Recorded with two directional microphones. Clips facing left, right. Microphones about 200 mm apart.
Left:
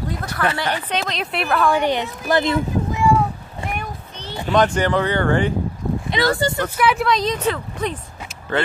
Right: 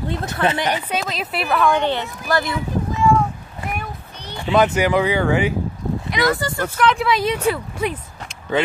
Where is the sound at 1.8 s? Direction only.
15° left (ahead or behind).